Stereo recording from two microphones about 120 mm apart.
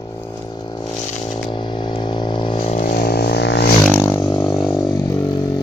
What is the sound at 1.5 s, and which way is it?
Vehicle, 40° left (ahead or behind).